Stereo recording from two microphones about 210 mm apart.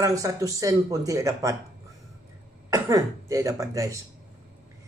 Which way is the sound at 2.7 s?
15° right (ahead or behind).